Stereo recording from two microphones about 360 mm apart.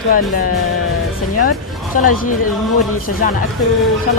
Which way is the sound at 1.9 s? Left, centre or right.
Left.